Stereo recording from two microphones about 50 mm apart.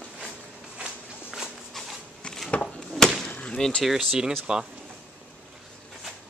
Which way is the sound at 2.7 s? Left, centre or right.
Centre.